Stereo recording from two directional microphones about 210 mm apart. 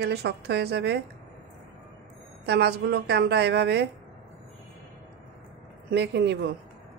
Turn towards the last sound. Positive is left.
turn(degrees=-55)  # may be behind; listen again after turning